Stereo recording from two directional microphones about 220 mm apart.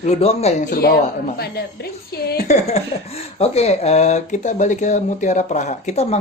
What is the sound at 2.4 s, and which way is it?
Speech, 30° left (ahead or behind).